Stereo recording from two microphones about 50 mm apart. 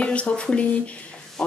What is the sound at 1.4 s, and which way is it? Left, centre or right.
Speech, centre.